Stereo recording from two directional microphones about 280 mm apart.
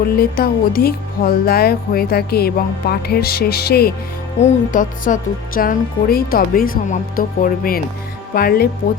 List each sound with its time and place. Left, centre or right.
0.0 s speech: left